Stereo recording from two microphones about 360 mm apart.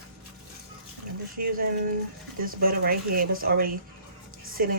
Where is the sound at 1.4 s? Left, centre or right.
Right.